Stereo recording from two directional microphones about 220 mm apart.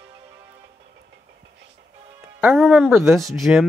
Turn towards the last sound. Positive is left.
turn(degrees=0)  # may be behind; listen again after turning